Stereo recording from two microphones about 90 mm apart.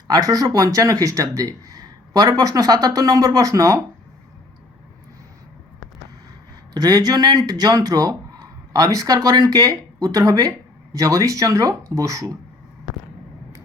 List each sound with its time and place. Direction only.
0.1 s speech: 40° right (ahead or behind)
6.7 s speech: 50° right (ahead or behind)